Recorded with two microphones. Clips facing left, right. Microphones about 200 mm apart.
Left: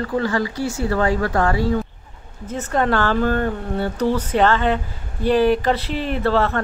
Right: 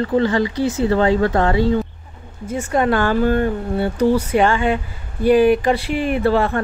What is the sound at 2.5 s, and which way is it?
Speech, 10° right (ahead or behind).